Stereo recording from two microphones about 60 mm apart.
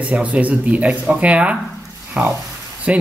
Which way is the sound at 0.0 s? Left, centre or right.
Right.